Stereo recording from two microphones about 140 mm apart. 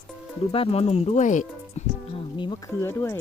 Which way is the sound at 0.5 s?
45° left (ahead or behind).